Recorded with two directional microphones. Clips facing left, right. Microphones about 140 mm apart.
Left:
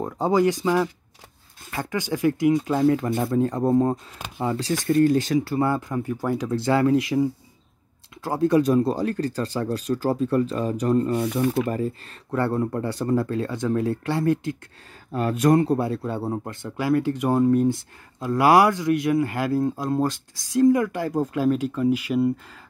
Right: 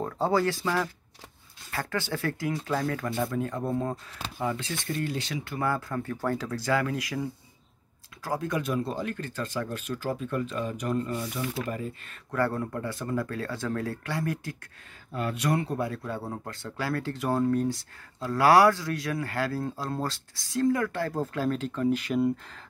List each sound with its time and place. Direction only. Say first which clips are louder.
0.0 s speech: left 5 dB; 15° left (ahead or behind); by 4.7 s 35° left (ahead or behind)
4.8 s speech: left 14 dB; 45° left (ahead or behind)
11.1 s speech: left 10 dB; 55° left (ahead or behind)
11.7 s speech: left 8 dB; 35° left (ahead or behind)
15.1 s speech: left 9 dB; 45° left (ahead or behind); by 22.3 s 5° left (ahead or behind)